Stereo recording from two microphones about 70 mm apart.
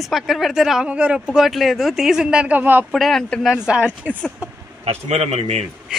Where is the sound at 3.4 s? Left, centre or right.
Centre.